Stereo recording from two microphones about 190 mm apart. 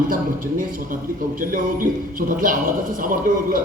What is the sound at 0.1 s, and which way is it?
A man's voice, 45° right (ahead or behind).